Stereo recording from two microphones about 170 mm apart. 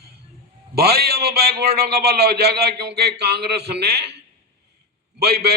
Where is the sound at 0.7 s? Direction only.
70° right (ahead or behind).